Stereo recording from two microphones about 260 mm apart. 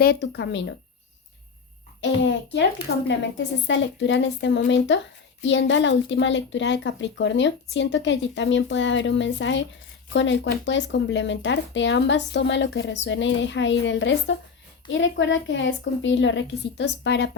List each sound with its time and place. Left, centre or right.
0.0 s speech: left
2.0 s speech: left